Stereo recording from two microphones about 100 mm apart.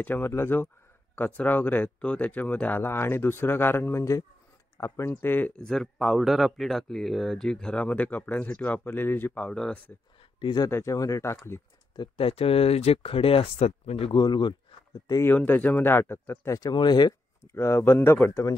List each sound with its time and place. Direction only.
0.0 s speech: 20° left (ahead or behind)
5.6 s speech: 5° left (ahead or behind)
10.4 s speech: 45° left (ahead or behind)
10.7 s speech: 30° left (ahead or behind)
12.2 s speech: 70° left (ahead or behind)
14.1 s speech: 50° left (ahead or behind)
15.2 s speech: 20° left (ahead or behind)
16.7 s speech: 45° left (ahead or behind)
17.6 s speech: 25° left (ahead or behind)